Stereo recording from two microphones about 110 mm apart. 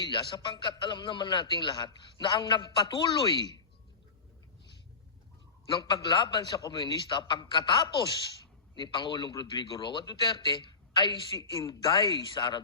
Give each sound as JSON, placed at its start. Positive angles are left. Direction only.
{"t": 0.0, "sound": "a man's voice", "side_deg": 45}
{"t": 5.6, "sound": "a man's voice", "side_deg": 45}